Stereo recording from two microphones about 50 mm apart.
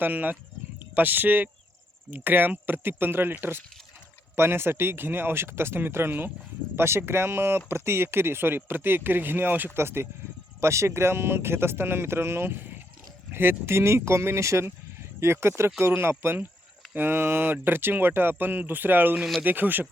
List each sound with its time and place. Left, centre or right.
0.0 s speech: right
6.7 s speech: right
9.7 s speech: right
10.6 s speech: right